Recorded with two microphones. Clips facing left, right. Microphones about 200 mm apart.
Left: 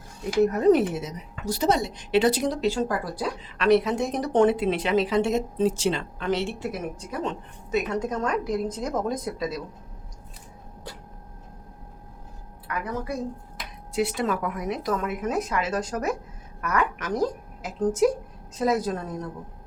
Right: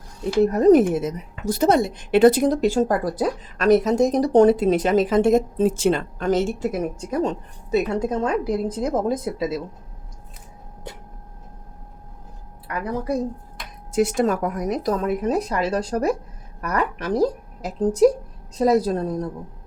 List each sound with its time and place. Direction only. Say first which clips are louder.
0.3 s a woman's voice: right 5 dB; 35° right (ahead or behind)
12.6 s a woman's voice: right 5 dB; 35° right (ahead or behind)
13.9 s a woman's voice: right 6 dB; 45° right (ahead or behind)